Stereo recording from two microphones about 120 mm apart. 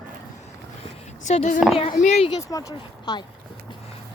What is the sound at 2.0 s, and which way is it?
Speech, 60° left (ahead or behind).